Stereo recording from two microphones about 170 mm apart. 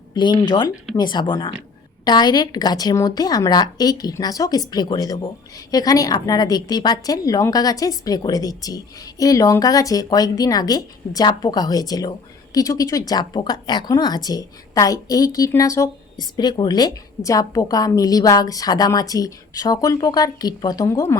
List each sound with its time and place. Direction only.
0.1 s a woman's voice: 25° left (ahead or behind)